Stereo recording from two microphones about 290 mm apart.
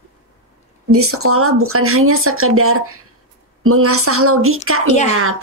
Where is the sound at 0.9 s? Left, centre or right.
Right.